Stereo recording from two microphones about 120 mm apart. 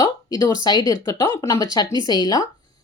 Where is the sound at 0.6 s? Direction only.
35° left (ahead or behind).